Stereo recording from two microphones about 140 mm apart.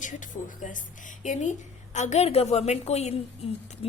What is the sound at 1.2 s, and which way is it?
A woman's voice, 60° left (ahead or behind).